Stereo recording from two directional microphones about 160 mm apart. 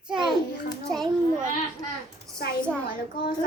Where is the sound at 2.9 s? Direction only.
65° left (ahead or behind).